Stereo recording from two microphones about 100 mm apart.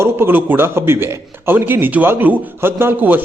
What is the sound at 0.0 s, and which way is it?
A man's voice, 20° right (ahead or behind).